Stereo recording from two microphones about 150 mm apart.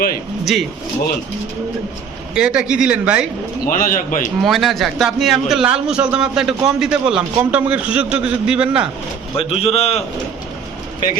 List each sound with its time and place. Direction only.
0.5 s a man's voice: centre (ahead or behind)
2.3 s speech: 5° right (ahead or behind)
3.7 s a man's voice: 70° left (ahead or behind)
4.4 s a man's voice: centre (ahead or behind)
9.4 s a man's voice: 40° left (ahead or behind)